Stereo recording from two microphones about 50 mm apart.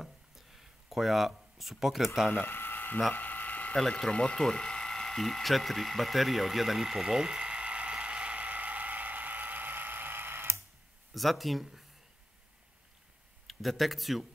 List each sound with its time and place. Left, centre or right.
0.0 s a sound: centre
2.3 s speech: left
3.2 s a sound: left
4.1 s ratchet: left; by 10.6 s right
11.1 s speech: centre
13.5 s speech: centre